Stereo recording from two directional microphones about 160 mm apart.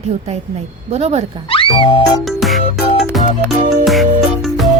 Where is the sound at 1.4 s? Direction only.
35° left (ahead or behind).